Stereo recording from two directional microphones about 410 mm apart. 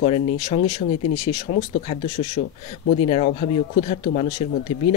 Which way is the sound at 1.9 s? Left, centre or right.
Centre.